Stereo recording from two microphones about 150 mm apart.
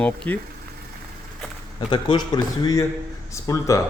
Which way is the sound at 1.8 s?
30° left (ahead or behind).